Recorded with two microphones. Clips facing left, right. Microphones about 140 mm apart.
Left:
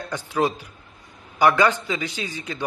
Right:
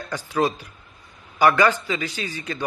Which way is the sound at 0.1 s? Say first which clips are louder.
Right 1 dB; 15° left (ahead or behind).